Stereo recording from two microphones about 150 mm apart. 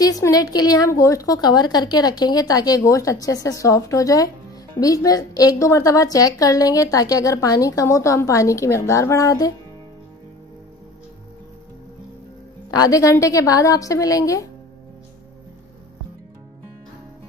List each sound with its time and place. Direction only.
0.0 s a woman's voice: 25° left (ahead or behind)
12.7 s a woman's voice: 25° left (ahead or behind)